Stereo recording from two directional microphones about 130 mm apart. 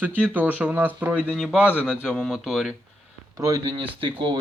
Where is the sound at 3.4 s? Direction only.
30° right (ahead or behind).